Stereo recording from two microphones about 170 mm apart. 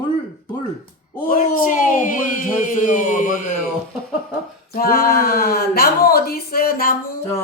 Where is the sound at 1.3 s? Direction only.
50° left (ahead or behind).